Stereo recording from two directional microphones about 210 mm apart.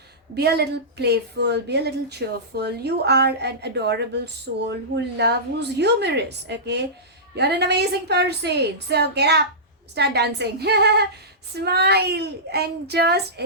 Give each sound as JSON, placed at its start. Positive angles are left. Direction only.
{"t": 0.3, "sound": "a woman's voice", "side_deg": -50}